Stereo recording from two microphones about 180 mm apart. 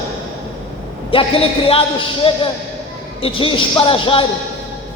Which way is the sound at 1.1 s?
30° left (ahead or behind).